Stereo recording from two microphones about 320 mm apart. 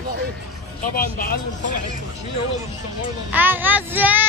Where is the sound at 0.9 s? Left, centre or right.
Left.